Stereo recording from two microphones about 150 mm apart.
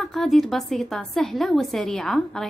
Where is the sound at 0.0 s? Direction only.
Centre (ahead or behind).